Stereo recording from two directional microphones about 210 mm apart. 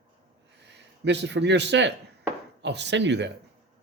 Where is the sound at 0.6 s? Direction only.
55° right (ahead or behind).